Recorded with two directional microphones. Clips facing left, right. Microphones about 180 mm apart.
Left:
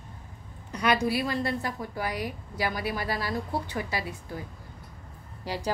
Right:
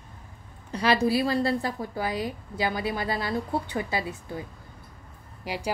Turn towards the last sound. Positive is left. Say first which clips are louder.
# even
turn(degrees=-10)  # may be behind; listen again after turning